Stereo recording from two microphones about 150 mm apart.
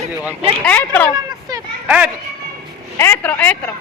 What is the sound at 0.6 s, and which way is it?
Speech, 10° left (ahead or behind).